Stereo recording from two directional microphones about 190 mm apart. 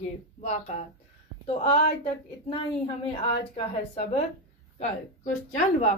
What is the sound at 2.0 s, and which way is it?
A woman's voice, 30° left (ahead or behind).